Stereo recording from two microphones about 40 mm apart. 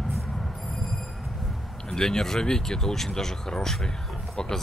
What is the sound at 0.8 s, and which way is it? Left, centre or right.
Train, centre.